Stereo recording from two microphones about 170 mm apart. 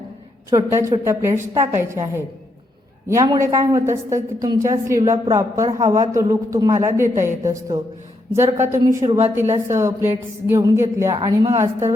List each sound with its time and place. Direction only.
0.5 s a woman's voice: 20° right (ahead or behind)
9.0 s a woman's voice: 40° right (ahead or behind)
9.3 s a woman's voice: 15° right (ahead or behind)